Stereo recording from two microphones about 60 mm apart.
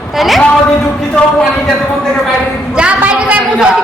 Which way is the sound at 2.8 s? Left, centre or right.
Right.